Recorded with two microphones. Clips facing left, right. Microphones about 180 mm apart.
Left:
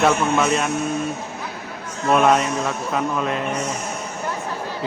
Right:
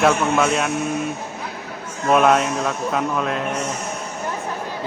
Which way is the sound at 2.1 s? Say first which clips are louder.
Right 1 dB; centre (ahead or behind).